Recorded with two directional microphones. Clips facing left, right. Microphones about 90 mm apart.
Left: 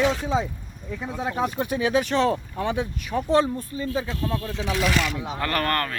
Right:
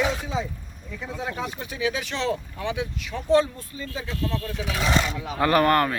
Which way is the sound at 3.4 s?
25° left (ahead or behind).